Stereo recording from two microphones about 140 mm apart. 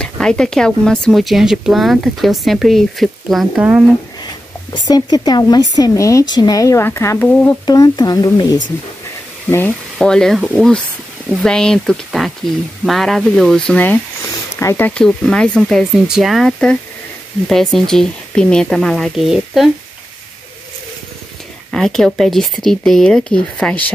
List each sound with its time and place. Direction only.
0.0 s speech: 5° left (ahead or behind)
4.7 s speech: 30° left (ahead or behind)
7.6 s speech: 30° left (ahead or behind)
9.9 s speech: 5° left (ahead or behind); by 14.9 s 20° left (ahead or behind)
14.9 s speech: 5° left (ahead or behind)
21.6 s speech: 5° left (ahead or behind)